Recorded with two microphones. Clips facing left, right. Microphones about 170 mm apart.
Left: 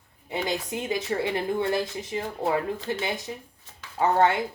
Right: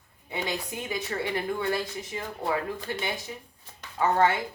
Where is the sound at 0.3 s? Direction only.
20° left (ahead or behind).